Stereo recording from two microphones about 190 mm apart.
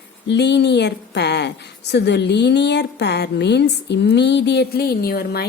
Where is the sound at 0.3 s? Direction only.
60° left (ahead or behind).